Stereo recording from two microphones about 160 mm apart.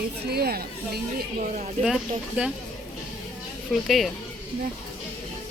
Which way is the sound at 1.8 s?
5° right (ahead or behind).